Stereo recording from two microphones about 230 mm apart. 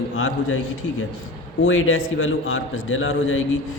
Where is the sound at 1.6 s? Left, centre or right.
Left.